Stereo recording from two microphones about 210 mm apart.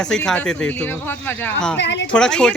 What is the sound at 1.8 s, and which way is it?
Speech, 55° left (ahead or behind).